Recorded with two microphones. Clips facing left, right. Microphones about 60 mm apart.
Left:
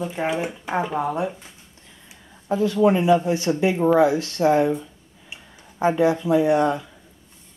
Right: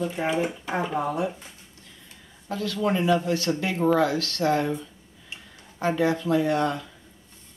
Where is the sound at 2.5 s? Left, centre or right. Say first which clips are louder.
Left 8 dB; left.